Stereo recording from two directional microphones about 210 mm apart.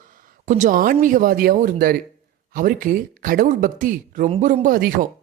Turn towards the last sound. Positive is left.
turn(degrees=-40)  # may be behind; listen again after turning